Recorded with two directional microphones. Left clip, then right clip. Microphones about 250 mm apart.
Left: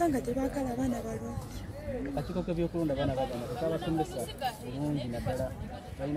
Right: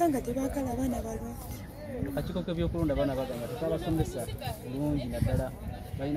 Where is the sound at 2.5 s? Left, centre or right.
Right.